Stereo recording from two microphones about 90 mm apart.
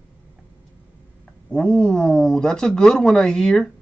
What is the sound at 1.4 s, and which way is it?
Speech, 10° left (ahead or behind).